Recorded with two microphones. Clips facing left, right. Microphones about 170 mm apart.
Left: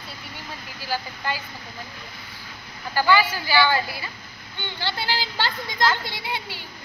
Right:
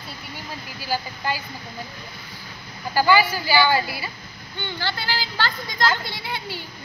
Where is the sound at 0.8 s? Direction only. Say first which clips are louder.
Right 2 dB; 10° right (ahead or behind).